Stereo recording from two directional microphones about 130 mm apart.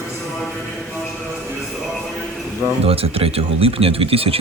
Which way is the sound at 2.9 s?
50° right (ahead or behind).